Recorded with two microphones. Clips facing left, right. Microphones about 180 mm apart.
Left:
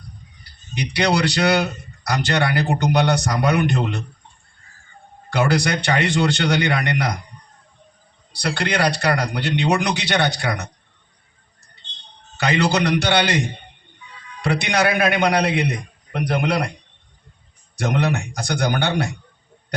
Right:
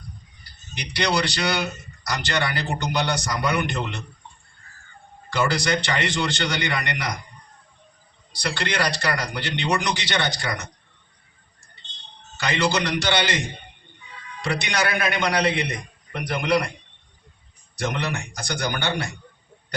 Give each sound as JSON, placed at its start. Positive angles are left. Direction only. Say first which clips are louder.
{"t": 0.9, "sound": "a man's voice", "louder": "left 4 dB", "side_deg": 65}
{"t": 5.3, "sound": "a man's voice", "louder": "left 3 dB", "side_deg": 65}
{"t": 8.4, "sound": "a man's voice", "louder": "left 4 dB", "side_deg": 65}
{"t": 12.4, "sound": "a man's voice", "louder": "left 4 dB", "side_deg": 65}
{"t": 14.4, "sound": "a man's voice", "louder": "left 5 dB", "side_deg": 60}
{"t": 17.7, "sound": "a man's voice", "louder": "left 6 dB", "side_deg": 65}